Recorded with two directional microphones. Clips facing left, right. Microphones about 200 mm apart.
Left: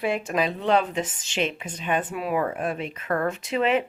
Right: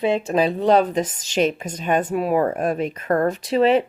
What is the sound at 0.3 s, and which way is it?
A woman's voice, 30° right (ahead or behind).